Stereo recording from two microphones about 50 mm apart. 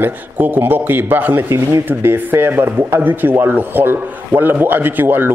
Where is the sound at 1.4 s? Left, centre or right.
Right.